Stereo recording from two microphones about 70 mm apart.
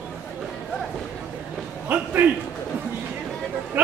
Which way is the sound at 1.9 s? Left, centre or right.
Right.